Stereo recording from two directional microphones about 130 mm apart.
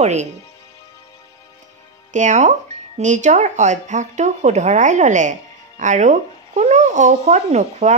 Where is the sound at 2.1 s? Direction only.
70° right (ahead or behind).